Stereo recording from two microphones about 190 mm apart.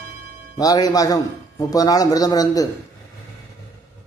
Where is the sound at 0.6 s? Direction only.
20° left (ahead or behind).